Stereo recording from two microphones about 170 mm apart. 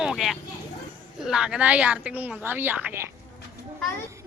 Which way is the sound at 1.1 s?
5° right (ahead or behind).